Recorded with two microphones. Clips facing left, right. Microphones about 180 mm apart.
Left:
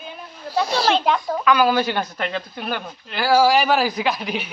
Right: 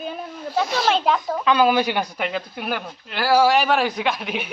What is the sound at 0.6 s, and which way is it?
Speech, 35° left (ahead or behind).